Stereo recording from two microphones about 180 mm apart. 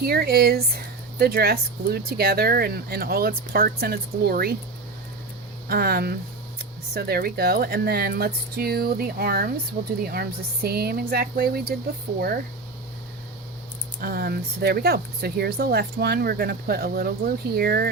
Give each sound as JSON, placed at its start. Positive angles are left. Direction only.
{"t": 0.0, "sound": "speech", "side_deg": -60}
{"t": 5.6, "sound": "speech", "side_deg": -60}
{"t": 14.0, "sound": "speech", "side_deg": -55}